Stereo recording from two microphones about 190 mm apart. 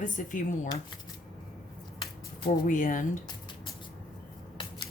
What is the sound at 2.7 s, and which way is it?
Speech, 45° left (ahead or behind).